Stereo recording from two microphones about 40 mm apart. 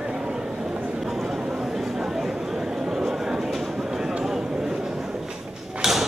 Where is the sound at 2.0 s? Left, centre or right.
Centre.